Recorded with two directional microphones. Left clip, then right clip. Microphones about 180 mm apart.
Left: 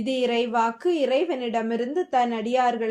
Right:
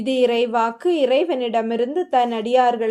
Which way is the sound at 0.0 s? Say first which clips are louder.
Right 6 dB; 30° right (ahead or behind).